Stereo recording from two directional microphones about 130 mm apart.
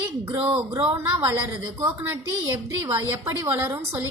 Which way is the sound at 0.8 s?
45° right (ahead or behind).